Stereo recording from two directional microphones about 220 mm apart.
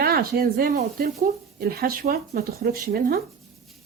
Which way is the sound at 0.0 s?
45° right (ahead or behind).